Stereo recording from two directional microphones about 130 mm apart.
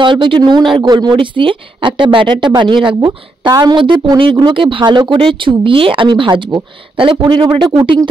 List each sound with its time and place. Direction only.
0.0 s a woman's voice: 40° right (ahead or behind)